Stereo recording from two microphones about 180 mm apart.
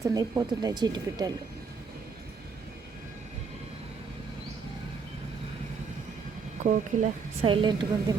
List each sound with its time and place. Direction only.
0.0 s speech: 20° right (ahead or behind)
6.6 s speech: 40° right (ahead or behind)
7.4 s speech: 30° right (ahead or behind)